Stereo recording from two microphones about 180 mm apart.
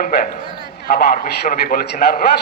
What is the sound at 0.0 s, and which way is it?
A man's voice, 55° left (ahead or behind).